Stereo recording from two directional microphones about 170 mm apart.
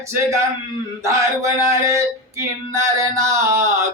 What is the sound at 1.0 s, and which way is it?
Speech, 20° right (ahead or behind).